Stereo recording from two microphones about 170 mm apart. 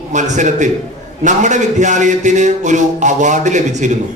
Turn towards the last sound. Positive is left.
turn(degrees=-45)  # may be behind; listen again after turning